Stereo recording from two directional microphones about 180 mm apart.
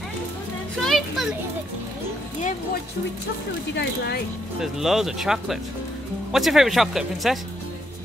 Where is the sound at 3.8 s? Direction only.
65° left (ahead or behind).